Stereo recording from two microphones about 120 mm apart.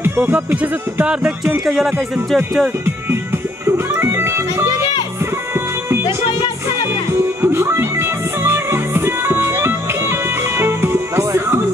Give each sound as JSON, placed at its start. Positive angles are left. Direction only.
{"t": 0.0, "sound": "speech", "side_deg": -15}
{"t": 3.6, "sound": "music", "side_deg": -20}
{"t": 7.1, "sound": "music", "side_deg": -20}